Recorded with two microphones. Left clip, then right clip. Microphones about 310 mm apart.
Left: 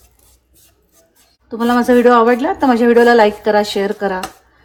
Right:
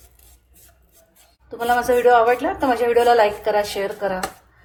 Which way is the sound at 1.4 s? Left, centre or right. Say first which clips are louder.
Left 4 dB; left.